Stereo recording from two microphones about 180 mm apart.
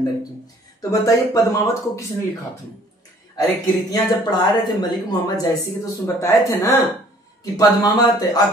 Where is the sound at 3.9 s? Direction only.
25° left (ahead or behind).